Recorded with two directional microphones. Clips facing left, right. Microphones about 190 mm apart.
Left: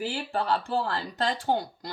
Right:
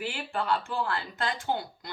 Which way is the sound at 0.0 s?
40° left (ahead or behind).